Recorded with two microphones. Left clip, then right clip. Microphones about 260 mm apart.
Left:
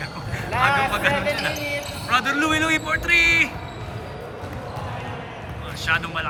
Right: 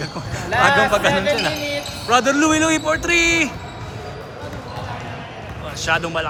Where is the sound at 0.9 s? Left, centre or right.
Centre.